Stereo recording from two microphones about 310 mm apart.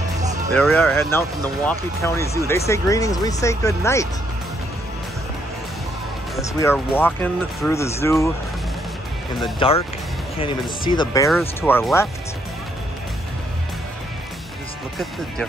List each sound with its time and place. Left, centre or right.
0.6 s speech: centre
6.3 s speech: centre
9.4 s speech: centre
11.2 s speech: centre